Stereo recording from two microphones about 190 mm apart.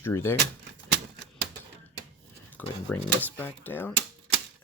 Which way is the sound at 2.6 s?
10° left (ahead or behind).